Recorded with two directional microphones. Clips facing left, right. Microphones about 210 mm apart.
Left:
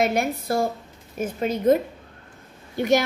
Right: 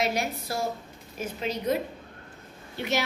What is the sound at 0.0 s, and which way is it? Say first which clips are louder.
A woman's voice: left 6 dB; 55° left (ahead or behind).